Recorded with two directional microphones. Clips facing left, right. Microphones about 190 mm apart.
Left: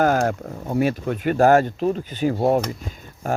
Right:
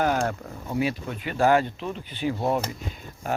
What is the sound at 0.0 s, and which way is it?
Speech, 45° left (ahead or behind).